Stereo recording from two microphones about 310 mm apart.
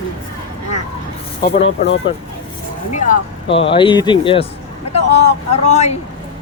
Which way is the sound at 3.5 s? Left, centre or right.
Centre.